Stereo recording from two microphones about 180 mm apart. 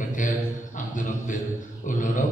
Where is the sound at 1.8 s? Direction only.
45° left (ahead or behind).